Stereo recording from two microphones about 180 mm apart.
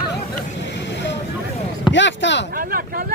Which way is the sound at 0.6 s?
75° left (ahead or behind).